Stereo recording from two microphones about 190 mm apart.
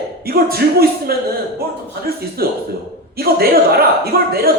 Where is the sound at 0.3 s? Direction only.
55° right (ahead or behind).